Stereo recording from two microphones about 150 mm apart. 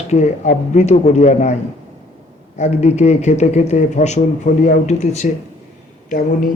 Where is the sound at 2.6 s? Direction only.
50° left (ahead or behind).